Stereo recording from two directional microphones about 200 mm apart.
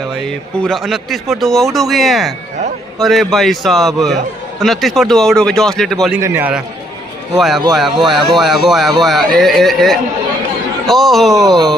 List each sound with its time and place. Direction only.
0.2 s speech: centre (ahead or behind)
6.2 s a man's voice: 10° right (ahead or behind)
11.3 s speech: 20° right (ahead or behind)